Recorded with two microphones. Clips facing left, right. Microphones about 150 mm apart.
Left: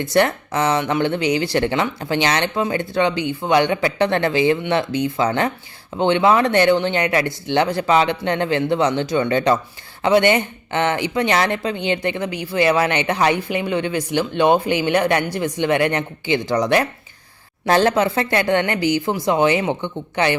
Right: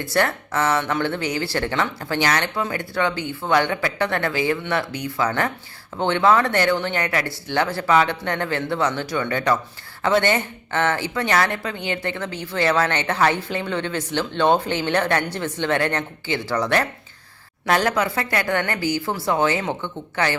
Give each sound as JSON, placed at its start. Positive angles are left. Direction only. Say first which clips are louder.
{"t": 0.0, "sound": "speech", "louder": "left 4 dB", "side_deg": 20}
{"t": 17.7, "sound": "speech", "louder": "left 4 dB", "side_deg": 25}